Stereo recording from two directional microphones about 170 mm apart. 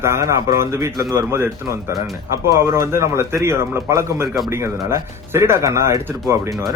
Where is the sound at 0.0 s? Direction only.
15° right (ahead or behind).